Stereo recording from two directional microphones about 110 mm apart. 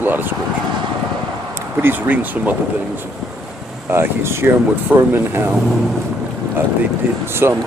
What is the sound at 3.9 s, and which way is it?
Speech, 20° right (ahead or behind).